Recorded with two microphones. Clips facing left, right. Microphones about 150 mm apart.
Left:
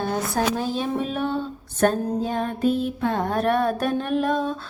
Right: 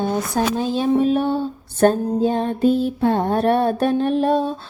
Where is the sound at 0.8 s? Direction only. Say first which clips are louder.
Right 8 dB; 35° right (ahead or behind).